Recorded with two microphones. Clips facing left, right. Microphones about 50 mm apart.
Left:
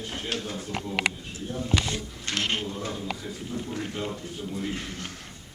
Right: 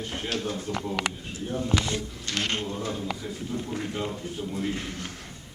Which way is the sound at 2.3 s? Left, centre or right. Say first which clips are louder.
Left 1 dB; left.